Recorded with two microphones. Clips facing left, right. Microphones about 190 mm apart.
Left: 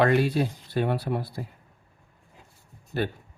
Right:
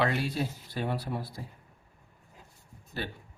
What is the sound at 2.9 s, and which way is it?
Speech, 55° left (ahead or behind).